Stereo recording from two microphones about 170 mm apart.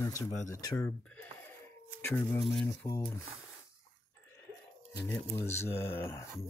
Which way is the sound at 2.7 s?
20° left (ahead or behind).